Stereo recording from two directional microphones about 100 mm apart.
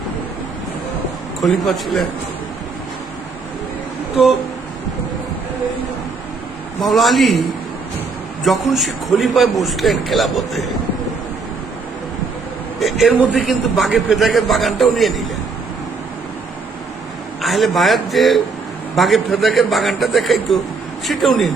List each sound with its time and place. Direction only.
1.4 s a man's voice: 5° left (ahead or behind)
6.8 s a man's voice: centre (ahead or behind)
8.4 s a man's voice: centre (ahead or behind)
12.8 s a man's voice: centre (ahead or behind)
17.4 s a man's voice: centre (ahead or behind)